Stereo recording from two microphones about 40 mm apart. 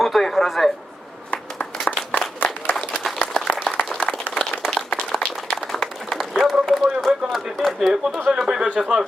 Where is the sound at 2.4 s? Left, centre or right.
Left.